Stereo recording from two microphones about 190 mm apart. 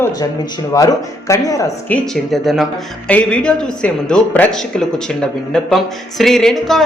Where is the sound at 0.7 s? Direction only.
15° left (ahead or behind).